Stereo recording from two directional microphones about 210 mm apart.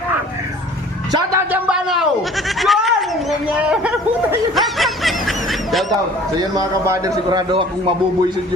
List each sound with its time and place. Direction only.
1.6 s a sound: 5° right (ahead or behind)
2.6 s goat: centre (ahead or behind)
3.6 s speech: 5° right (ahead or behind)
6.6 s a man's voice: 15° right (ahead or behind)